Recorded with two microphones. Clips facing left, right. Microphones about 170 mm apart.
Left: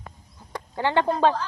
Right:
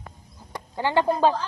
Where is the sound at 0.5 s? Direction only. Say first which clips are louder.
Left 1 dB; 15° right (ahead or behind).